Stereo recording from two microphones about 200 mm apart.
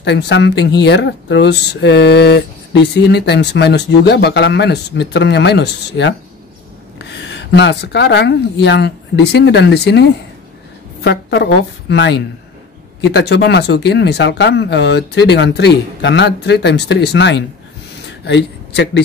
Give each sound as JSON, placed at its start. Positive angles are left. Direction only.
{"t": 0.0, "sound": "speech", "side_deg": 60}